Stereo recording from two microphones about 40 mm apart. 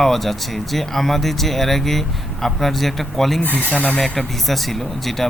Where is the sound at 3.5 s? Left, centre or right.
Left.